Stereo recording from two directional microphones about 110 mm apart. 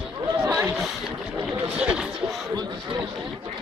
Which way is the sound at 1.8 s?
5° right (ahead or behind).